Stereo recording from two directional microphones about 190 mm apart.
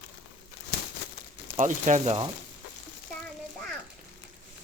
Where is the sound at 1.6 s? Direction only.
40° right (ahead or behind).